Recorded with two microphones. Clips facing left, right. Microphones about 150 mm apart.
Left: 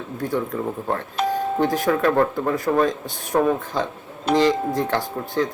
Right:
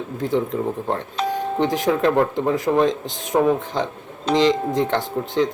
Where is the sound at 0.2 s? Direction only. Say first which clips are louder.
Right 3 dB; 20° right (ahead or behind).